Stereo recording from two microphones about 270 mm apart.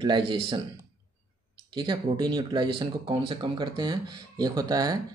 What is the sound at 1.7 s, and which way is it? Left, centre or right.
Speech, centre.